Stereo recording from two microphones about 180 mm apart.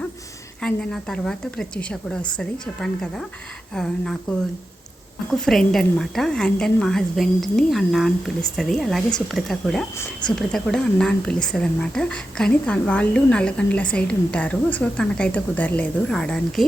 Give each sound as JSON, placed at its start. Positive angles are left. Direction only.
{"t": 0.6, "sound": "a woman's voice", "side_deg": 5}
{"t": 10.0, "sound": "a woman's voice", "side_deg": 25}
{"t": 10.3, "sound": "a woman's voice", "side_deg": 5}